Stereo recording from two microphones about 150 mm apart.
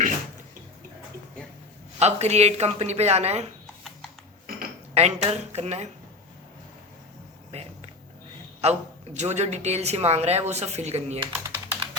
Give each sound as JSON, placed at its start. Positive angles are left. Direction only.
{"t": 2.0, "sound": "speech", "side_deg": -45}
{"t": 4.5, "sound": "cutlery", "side_deg": -75}
{"t": 4.9, "sound": "speech", "side_deg": -45}
{"t": 7.5, "sound": "speech", "side_deg": -45}
{"t": 11.4, "sound": "typing", "side_deg": -20}